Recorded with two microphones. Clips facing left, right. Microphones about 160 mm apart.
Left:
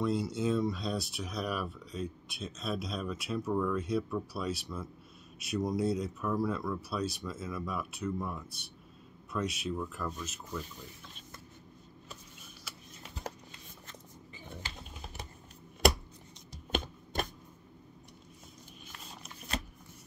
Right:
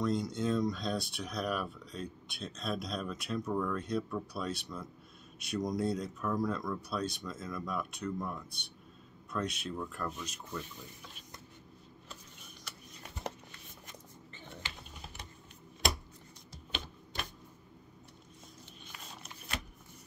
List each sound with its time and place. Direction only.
0.0 s speech: 5° left (ahead or behind)
12.6 s music: 5° left (ahead or behind)
16.7 s typewriter: 45° left (ahead or behind)